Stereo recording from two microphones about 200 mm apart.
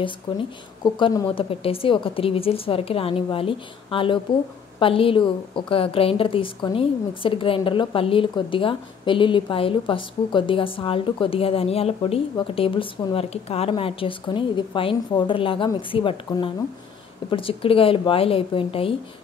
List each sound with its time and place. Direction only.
0.3 s a woman's voice: 25° left (ahead or behind)